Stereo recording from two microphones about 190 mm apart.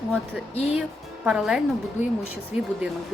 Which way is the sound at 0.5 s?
35° left (ahead or behind).